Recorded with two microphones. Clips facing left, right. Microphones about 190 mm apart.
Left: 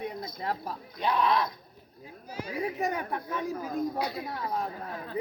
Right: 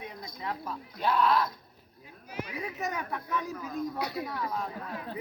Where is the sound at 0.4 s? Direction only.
35° left (ahead or behind).